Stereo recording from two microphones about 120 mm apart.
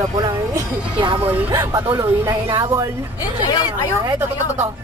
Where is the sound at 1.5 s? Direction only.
20° right (ahead or behind).